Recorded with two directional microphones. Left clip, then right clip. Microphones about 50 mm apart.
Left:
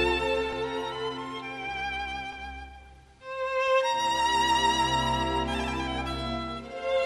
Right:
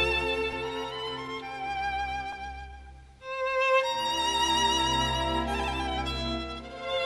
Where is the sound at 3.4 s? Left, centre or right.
Right.